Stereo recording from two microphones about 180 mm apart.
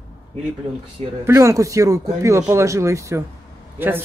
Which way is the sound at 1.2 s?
15° right (ahead or behind).